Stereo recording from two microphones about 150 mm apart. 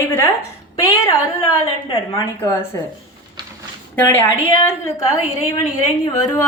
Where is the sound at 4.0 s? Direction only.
15° left (ahead or behind).